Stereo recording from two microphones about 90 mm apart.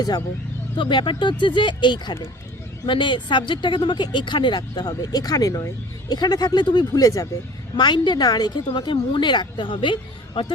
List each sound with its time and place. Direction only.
0.8 s speech: 60° left (ahead or behind); by 7.3 s 40° left (ahead or behind)
7.8 s speech: 55° left (ahead or behind)